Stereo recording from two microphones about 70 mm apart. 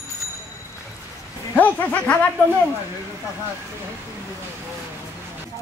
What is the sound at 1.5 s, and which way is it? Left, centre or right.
Speech, left.